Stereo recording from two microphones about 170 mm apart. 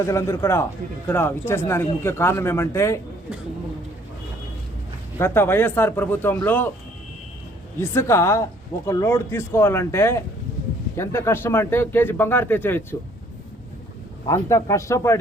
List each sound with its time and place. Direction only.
0.0 s speech: 15° left (ahead or behind)
5.2 s speech: 15° left (ahead or behind)
7.8 s speech: 15° left (ahead or behind)
14.3 s speech: 20° left (ahead or behind)